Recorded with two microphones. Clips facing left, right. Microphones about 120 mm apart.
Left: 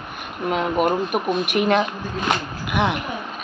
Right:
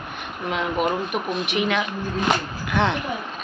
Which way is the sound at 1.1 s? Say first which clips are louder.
Left 4 dB; 50° left (ahead or behind).